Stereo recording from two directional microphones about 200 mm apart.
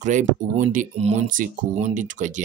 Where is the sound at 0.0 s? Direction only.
40° right (ahead or behind).